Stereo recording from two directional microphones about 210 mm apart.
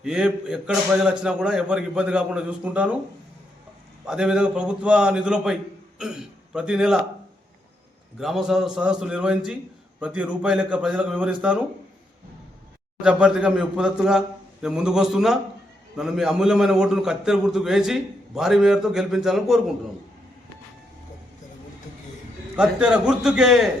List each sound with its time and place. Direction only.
0.0 s a man's voice: 5° right (ahead or behind)
4.0 s a man's voice: 5° right (ahead or behind)
8.2 s a man's voice: centre (ahead or behind)
13.0 s a man's voice: 5° right (ahead or behind)
22.5 s a man's voice: 5° right (ahead or behind)